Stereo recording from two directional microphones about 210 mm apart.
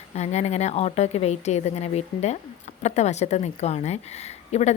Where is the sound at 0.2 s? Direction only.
30° left (ahead or behind).